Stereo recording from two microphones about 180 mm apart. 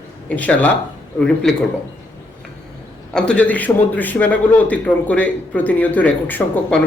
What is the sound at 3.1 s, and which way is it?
A man's voice, 5° left (ahead or behind).